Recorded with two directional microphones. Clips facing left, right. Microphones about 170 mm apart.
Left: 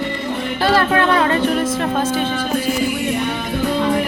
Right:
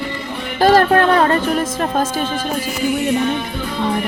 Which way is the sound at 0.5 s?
40° right (ahead or behind).